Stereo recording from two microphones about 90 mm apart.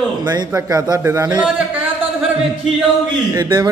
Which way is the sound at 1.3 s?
15° right (ahead or behind).